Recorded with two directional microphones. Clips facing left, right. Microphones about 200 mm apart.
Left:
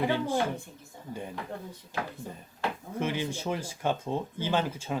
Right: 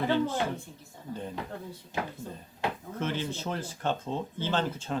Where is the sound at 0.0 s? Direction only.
15° left (ahead or behind).